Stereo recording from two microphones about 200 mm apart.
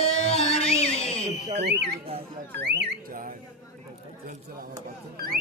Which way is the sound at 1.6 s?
55° right (ahead or behind).